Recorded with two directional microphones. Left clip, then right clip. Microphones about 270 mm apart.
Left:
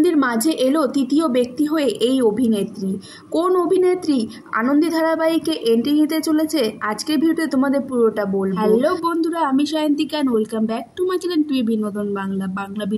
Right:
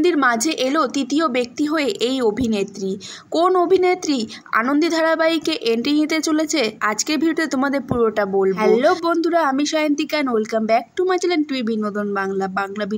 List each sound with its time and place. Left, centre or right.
0.0 s a woman's voice: left